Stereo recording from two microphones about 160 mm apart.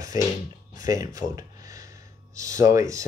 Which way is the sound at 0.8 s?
20° right (ahead or behind).